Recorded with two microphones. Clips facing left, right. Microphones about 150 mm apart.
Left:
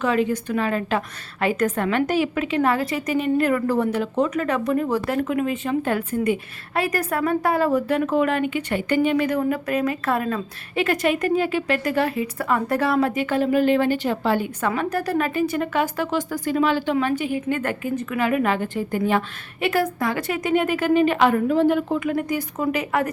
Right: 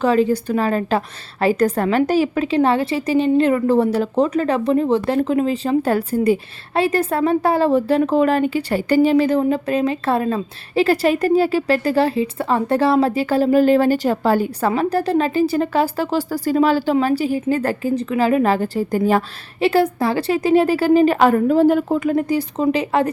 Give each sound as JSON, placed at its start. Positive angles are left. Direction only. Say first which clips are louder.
{"t": 0.0, "sound": "a woman's voice", "louder": "right 5 dB", "side_deg": -35}